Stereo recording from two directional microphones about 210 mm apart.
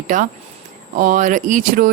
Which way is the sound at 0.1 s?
35° right (ahead or behind).